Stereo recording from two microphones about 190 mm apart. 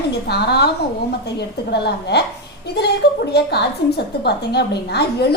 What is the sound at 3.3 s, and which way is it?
A woman's voice, 60° left (ahead or behind).